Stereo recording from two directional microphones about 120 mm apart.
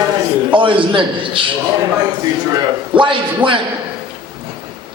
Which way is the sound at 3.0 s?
45° right (ahead or behind).